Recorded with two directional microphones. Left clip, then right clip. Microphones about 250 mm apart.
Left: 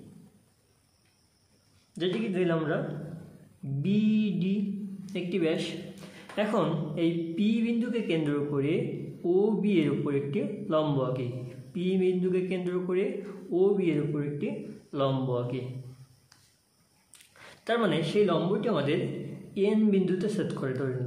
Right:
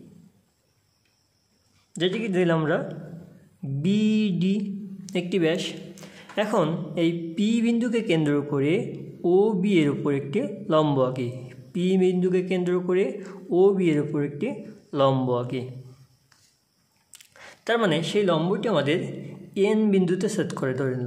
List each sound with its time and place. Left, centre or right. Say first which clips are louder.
2.0 s speech: right 5 dB; right
3.8 s mantra: right 4 dB; right
5.0 s speech: right 5 dB; right
17.3 s speech: right 5 dB; right